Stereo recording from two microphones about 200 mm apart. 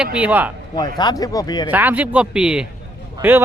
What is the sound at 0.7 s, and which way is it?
Speech, 20° left (ahead or behind).